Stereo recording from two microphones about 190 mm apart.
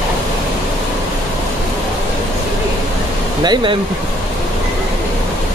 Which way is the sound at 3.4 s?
25° right (ahead or behind).